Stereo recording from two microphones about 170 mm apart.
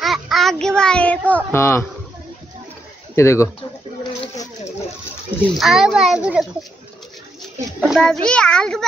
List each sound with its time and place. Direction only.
0.0 s child singing: centre (ahead or behind); by 1.9 s 15° left (ahead or behind)
3.2 s speech: 15° left (ahead or behind)
5.6 s a child's voice: centre (ahead or behind)
7.8 s a child's voice: centre (ahead or behind)